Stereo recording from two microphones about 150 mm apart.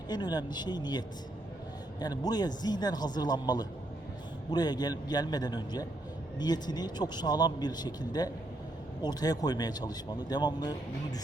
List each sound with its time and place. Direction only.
0.1 s speech: 30° left (ahead or behind)